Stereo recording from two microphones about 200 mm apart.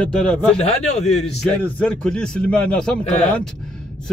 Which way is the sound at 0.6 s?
35° left (ahead or behind).